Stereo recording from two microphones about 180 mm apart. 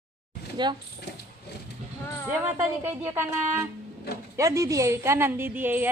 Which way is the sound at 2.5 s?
10° right (ahead or behind).